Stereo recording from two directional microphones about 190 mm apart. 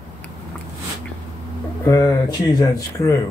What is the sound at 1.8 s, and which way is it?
Speech, 20° left (ahead or behind).